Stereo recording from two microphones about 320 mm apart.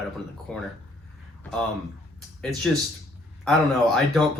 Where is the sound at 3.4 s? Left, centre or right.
Centre.